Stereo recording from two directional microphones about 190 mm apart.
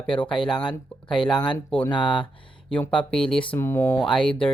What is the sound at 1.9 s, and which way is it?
Speech, 25° left (ahead or behind).